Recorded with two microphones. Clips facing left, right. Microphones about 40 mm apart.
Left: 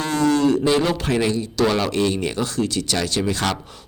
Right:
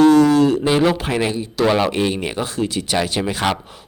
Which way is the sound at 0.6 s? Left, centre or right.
Centre.